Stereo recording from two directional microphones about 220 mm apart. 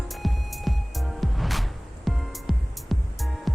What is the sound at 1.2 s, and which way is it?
Music, centre (ahead or behind).